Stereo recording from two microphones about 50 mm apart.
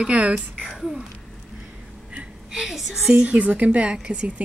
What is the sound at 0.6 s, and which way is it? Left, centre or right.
Speech, centre.